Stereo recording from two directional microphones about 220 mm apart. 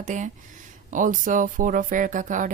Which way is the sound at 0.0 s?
35° right (ahead or behind).